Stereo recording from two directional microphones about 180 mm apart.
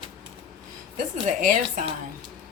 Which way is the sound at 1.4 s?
45° right (ahead or behind).